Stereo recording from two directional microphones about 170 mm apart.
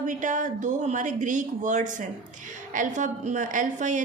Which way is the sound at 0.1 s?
45° right (ahead or behind).